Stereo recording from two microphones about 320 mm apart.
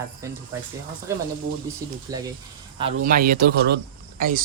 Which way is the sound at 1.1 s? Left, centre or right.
Centre.